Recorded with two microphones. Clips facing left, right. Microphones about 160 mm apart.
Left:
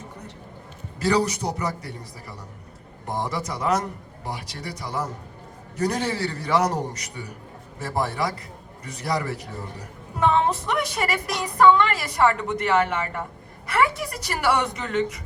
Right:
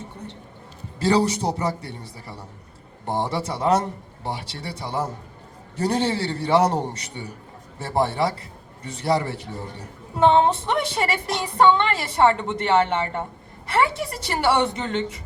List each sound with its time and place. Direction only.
0.9 s a man's voice: 30° right (ahead or behind)